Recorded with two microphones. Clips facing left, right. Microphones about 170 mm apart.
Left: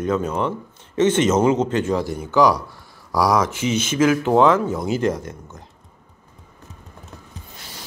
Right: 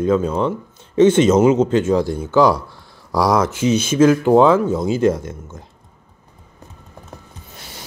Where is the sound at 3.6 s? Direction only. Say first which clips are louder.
Right 5 dB; 65° right (ahead or behind).